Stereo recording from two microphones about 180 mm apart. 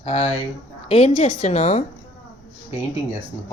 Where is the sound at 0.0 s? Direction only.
35° left (ahead or behind).